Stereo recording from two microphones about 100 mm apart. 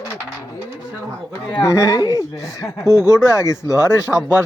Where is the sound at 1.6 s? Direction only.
30° left (ahead or behind).